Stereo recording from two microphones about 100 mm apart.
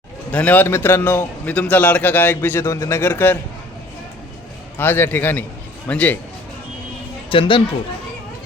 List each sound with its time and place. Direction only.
0.3 s a man's voice: 15° left (ahead or behind)
4.8 s a man's voice: 20° left (ahead or behind)
7.3 s speech: 60° left (ahead or behind)